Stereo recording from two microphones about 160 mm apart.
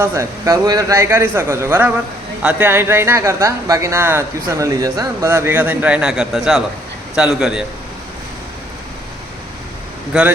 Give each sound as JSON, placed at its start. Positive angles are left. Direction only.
{"t": 0.0, "sound": "a man's voice", "side_deg": -15}
{"t": 10.1, "sound": "speech", "side_deg": -5}